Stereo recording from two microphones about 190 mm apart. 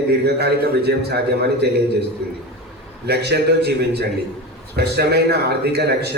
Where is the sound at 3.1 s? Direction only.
60° right (ahead or behind).